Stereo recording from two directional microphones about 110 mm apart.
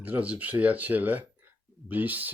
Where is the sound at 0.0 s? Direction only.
15° right (ahead or behind).